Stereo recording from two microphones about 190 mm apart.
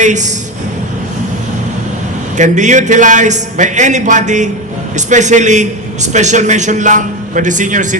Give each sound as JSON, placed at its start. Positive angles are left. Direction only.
{"t": 0.0, "sound": "a man's voice", "side_deg": -40}
{"t": 2.4, "sound": "a man's voice", "side_deg": -40}